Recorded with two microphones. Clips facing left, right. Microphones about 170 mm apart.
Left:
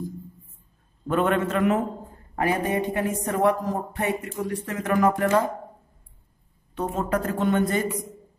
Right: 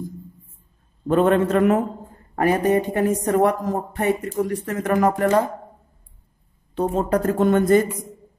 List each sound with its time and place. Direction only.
1.0 s speech: 35° right (ahead or behind)
6.7 s speech: 30° right (ahead or behind)